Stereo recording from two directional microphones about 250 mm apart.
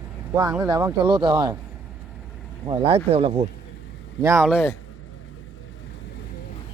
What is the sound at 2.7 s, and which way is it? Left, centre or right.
Speech, right.